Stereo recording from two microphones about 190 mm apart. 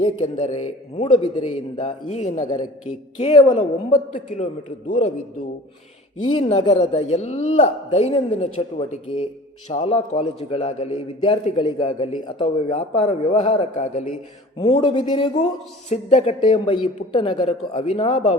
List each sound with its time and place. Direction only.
0.0 s a man's voice: 35° left (ahead or behind)
6.2 s a man's voice: 30° left (ahead or behind)